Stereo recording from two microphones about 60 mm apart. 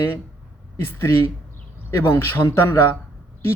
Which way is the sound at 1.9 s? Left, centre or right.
Left.